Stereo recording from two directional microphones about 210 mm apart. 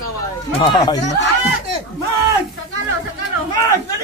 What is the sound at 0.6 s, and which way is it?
Speech, 20° left (ahead or behind).